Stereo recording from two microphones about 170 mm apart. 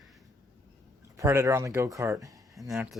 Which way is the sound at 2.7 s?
5° right (ahead or behind).